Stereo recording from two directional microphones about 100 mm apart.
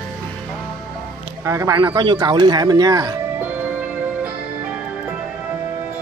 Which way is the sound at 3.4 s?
15° right (ahead or behind).